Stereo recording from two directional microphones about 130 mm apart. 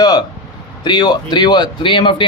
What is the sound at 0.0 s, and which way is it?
Speech, 30° left (ahead or behind).